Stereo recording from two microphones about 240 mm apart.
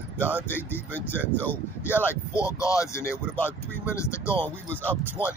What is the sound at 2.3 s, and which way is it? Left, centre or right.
Speech, centre.